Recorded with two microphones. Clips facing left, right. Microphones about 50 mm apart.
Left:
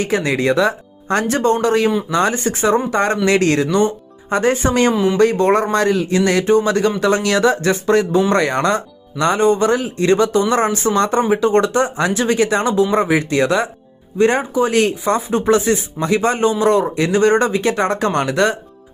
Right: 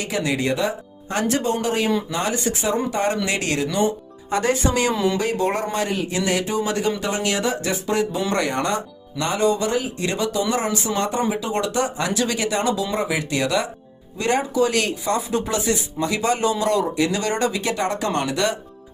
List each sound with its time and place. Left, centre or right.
0.0 s speech: left
5.7 s speech: left
10.9 s speech: left
11.2 s speech: left